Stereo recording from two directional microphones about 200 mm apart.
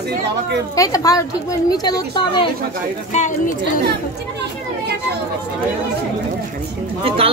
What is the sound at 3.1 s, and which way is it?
Speech, 40° left (ahead or behind).